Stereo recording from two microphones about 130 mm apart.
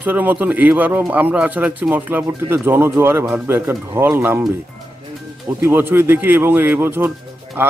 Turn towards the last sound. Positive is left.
turn(degrees=-15)  # may be behind; listen again after turning